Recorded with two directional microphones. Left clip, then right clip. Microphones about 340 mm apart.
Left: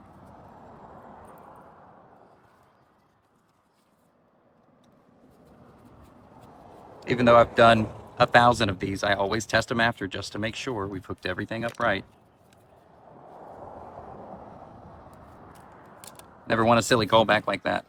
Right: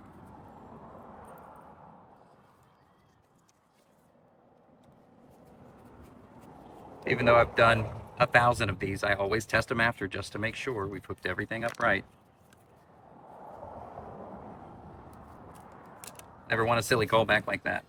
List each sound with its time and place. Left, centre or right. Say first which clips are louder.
7.0 s speech: left 5 dB; centre
16.5 s speech: left 6 dB; centre